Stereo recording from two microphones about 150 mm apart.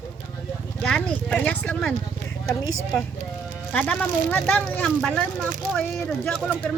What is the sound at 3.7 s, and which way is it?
Speech, 10° left (ahead or behind).